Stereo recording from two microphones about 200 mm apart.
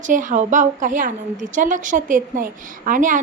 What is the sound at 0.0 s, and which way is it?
A woman's voice, 40° right (ahead or behind).